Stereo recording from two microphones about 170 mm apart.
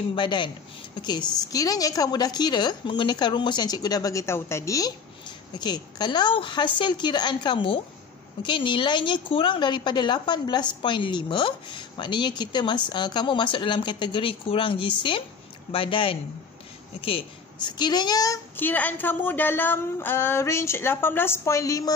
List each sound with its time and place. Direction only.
0.1 s a woman's voice: 30° left (ahead or behind)
1.5 s a woman's voice: 20° left (ahead or behind)